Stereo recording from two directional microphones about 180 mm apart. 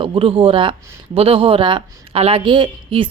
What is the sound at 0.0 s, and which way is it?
Speech, 30° right (ahead or behind).